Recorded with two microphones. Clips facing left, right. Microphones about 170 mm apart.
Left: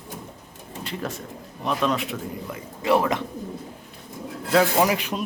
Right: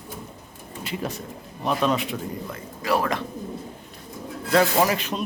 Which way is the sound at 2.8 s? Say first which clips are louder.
Left 3 dB; 20° left (ahead or behind).